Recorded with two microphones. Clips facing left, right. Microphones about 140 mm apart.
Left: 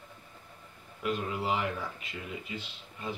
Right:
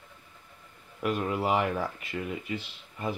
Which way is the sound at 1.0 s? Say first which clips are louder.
Right 4 dB; 55° right (ahead or behind).